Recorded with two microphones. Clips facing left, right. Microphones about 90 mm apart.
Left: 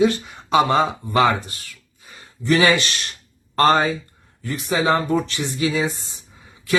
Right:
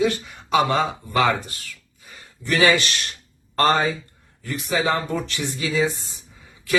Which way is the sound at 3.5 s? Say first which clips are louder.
Left 3 dB; 30° left (ahead or behind).